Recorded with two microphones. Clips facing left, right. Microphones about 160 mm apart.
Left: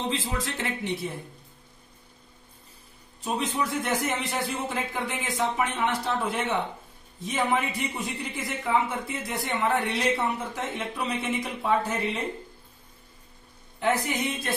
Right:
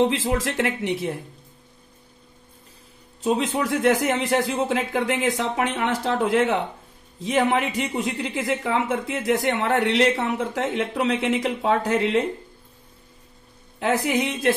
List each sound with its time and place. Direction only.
0.0 s a man's voice: 90° right
3.3 s a man's voice: 80° right
13.7 s a man's voice: 90° right